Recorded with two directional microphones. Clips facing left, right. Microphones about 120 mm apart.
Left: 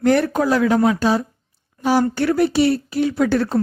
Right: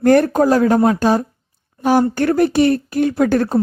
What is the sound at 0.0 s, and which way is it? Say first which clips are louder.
Speech: right 4 dB; 45° right (ahead or behind).